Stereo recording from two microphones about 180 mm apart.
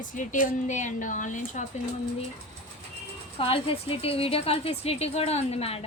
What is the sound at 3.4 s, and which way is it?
A woman's voice, 30° left (ahead or behind).